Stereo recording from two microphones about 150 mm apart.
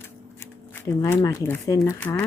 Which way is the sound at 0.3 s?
15° left (ahead or behind).